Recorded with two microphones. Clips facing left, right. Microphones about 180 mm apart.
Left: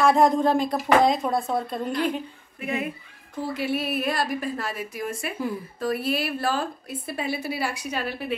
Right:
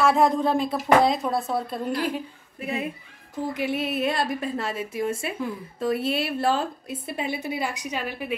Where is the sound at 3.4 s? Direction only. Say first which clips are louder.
Even; 15° right (ahead or behind).